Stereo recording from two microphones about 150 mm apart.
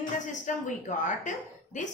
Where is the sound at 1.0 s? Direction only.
55° left (ahead or behind).